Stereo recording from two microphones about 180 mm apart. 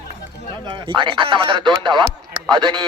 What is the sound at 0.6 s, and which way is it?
Speech, 25° right (ahead or behind).